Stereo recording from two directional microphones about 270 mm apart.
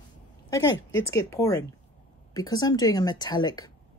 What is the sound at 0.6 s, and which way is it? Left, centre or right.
Speech, left.